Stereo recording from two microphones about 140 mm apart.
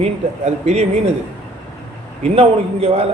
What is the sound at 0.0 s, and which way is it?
Speech, 50° right (ahead or behind).